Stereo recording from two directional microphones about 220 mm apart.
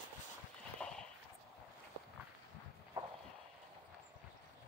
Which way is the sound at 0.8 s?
5° left (ahead or behind).